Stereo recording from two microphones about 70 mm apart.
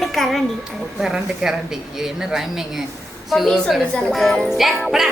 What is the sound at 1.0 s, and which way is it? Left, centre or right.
A woman's voice, centre.